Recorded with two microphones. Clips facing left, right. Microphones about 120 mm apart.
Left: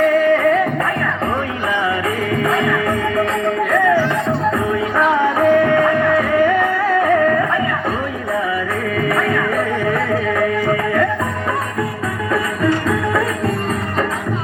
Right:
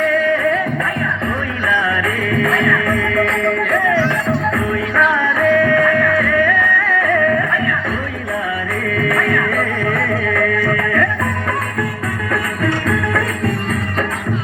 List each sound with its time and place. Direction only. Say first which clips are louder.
0.1 s music: left 3 dB; 40° left (ahead or behind)
2.0 s music: even; 30° left (ahead or behind)
4.5 s music: even; 30° left (ahead or behind)
9.0 s music: even; 25° left (ahead or behind)
12.3 s music: left 3 dB; 25° left (ahead or behind)